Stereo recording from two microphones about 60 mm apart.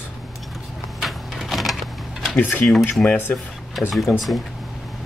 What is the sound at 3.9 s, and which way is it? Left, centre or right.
Speech, centre.